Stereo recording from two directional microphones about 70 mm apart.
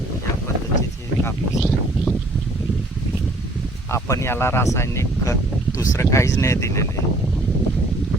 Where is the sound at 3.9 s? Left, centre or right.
Left.